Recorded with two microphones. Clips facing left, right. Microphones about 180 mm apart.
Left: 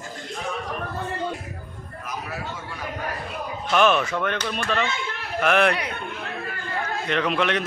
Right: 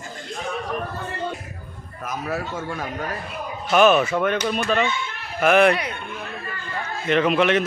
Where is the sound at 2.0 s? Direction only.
50° right (ahead or behind).